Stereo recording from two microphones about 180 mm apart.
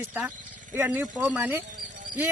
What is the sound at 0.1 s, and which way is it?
A man's voice, 10° right (ahead or behind).